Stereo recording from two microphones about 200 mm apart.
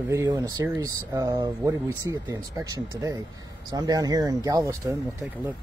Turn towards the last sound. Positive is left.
turn(degrees=-15)  # may be behind; listen again after turning